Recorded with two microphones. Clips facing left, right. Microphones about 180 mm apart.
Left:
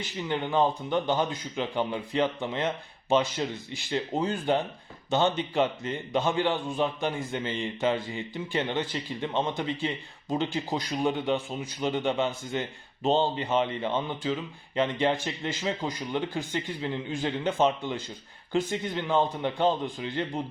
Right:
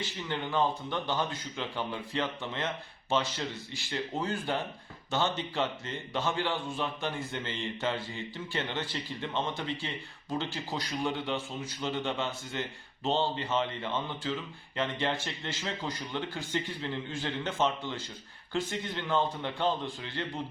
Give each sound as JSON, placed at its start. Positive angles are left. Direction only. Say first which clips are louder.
{"t": 0.0, "sound": "a man's voice", "louder": "left 4 dB", "side_deg": 15}